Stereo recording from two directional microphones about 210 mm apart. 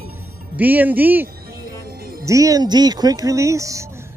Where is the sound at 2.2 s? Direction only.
15° right (ahead or behind).